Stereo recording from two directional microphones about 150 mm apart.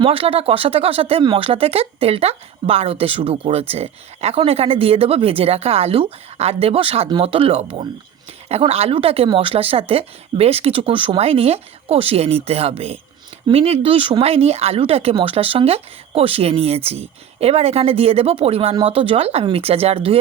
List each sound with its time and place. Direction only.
0.0 s speech: 40° right (ahead or behind)